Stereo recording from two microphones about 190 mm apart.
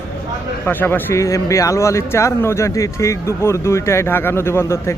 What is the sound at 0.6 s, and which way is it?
Speech, 10° left (ahead or behind).